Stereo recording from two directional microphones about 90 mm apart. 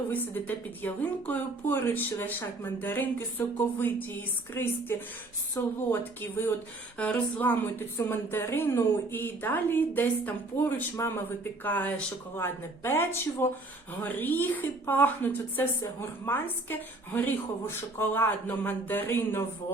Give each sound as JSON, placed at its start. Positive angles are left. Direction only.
{"t": 0.1, "sound": "a woman's voice", "side_deg": 20}
{"t": 7.0, "sound": "a woman's voice", "side_deg": 15}